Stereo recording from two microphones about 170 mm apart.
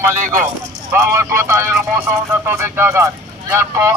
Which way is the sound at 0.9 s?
15° right (ahead or behind).